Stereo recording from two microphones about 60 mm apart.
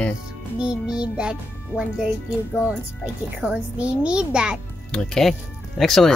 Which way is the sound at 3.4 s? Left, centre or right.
Centre.